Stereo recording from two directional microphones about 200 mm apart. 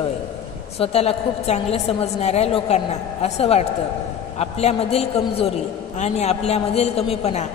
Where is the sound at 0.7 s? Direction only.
30° left (ahead or behind).